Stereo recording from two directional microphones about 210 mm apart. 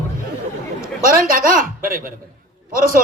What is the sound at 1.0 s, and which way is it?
A man's voice, 40° right (ahead or behind).